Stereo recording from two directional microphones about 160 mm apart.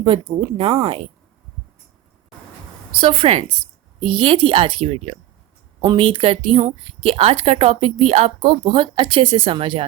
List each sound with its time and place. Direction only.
0.0 s a woman's voice: 30° right (ahead or behind)
3.0 s a woman's voice: 35° right (ahead or behind)